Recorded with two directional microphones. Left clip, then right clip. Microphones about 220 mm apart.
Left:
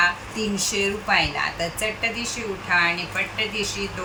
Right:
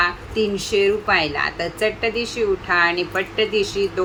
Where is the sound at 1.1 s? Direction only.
10° right (ahead or behind).